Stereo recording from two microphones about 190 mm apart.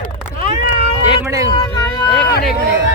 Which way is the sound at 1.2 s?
15° right (ahead or behind).